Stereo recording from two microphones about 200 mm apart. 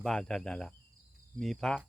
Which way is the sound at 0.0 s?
5° left (ahead or behind).